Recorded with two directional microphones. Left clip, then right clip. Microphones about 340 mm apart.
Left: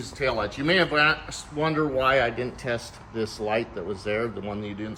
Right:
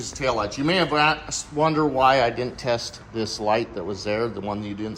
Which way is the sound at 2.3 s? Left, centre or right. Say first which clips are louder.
Right 4 dB; right.